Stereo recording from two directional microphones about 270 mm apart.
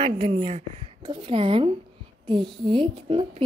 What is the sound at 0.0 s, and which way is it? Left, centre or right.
A woman's voice, centre.